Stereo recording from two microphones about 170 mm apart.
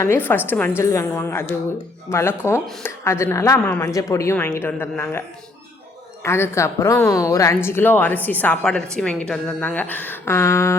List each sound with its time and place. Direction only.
0.0 s speech: 15° left (ahead or behind)
6.2 s speech: 15° left (ahead or behind)